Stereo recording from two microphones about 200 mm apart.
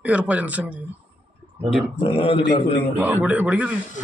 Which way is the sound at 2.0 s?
25° left (ahead or behind).